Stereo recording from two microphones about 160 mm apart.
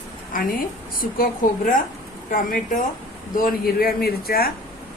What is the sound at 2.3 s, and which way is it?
Speech, 55° left (ahead or behind).